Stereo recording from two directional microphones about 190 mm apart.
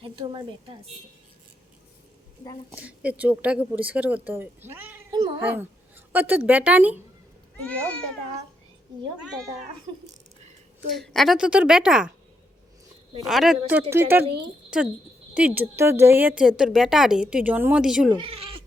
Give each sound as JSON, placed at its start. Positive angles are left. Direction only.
{"t": 0.0, "sound": "a woman's voice", "side_deg": -25}
{"t": 2.7, "sound": "a woman's voice", "side_deg": -5}
{"t": 7.6, "sound": "speech", "side_deg": 5}
{"t": 11.1, "sound": "a woman's voice", "side_deg": 0}
{"t": 13.2, "sound": "a woman's voice", "side_deg": 0}
{"t": 15.4, "sound": "a woman's voice", "side_deg": -10}
{"t": 18.2, "sound": "speech", "side_deg": -30}